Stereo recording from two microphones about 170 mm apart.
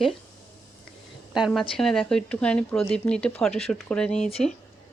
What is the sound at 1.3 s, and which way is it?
Speech, 5° right (ahead or behind).